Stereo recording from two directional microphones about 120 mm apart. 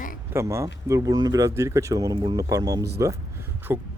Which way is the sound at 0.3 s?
25° right (ahead or behind).